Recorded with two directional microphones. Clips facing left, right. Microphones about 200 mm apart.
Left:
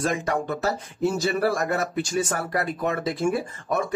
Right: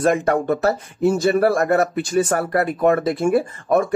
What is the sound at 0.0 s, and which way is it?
Speech, 60° right (ahead or behind).